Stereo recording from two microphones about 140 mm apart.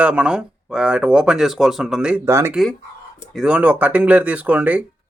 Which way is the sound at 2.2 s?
20° right (ahead or behind).